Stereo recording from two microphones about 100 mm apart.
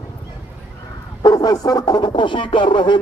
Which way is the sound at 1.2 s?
40° left (ahead or behind).